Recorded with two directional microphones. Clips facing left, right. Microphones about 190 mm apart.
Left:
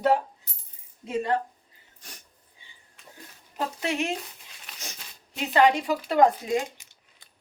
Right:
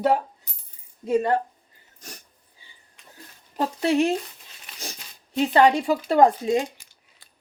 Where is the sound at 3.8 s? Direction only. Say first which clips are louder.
Right 9 dB; 35° right (ahead or behind).